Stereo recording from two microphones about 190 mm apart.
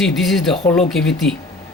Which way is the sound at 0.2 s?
Centre (ahead or behind).